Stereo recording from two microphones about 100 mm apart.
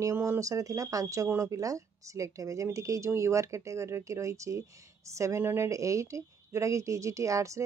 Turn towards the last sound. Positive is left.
turn(degrees=-30)  # may be behind; listen again after turning